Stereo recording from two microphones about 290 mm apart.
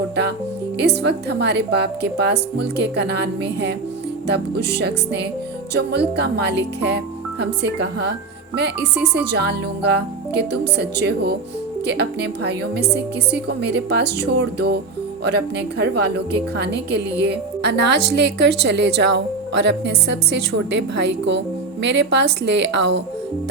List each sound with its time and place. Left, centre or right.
0.8 s a woman's voice: right
9.1 s a woman's voice: right